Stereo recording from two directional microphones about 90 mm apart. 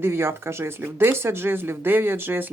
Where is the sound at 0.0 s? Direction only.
25° right (ahead or behind).